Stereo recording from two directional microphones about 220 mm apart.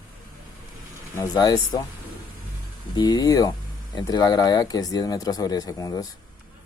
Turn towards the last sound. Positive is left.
turn(degrees=15)  # may be behind; listen again after turning